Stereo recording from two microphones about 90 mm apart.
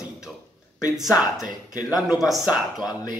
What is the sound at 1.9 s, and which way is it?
Speech, centre (ahead or behind).